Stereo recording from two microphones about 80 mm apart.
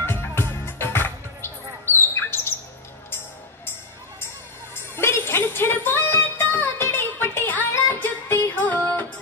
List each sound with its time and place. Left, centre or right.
0.0 s music: left
4.7 s music: left